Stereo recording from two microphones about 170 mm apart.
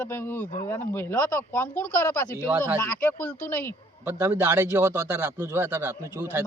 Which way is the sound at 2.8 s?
10° left (ahead or behind).